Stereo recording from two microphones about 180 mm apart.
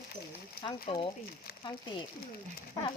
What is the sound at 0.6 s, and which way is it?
Speech, 30° left (ahead or behind).